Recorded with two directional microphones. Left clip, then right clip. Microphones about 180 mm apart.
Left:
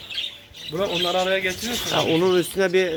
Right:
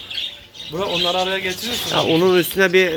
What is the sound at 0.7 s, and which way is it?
Speech, 55° left (ahead or behind).